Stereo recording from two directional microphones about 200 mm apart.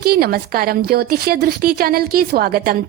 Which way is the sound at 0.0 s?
50° right (ahead or behind).